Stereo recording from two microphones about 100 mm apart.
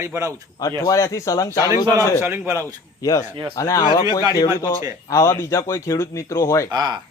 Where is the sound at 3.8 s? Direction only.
50° left (ahead or behind).